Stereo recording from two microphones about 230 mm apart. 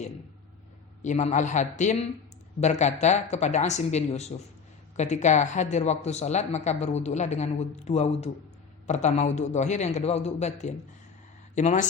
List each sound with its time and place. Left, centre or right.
1.0 s a man's voice: left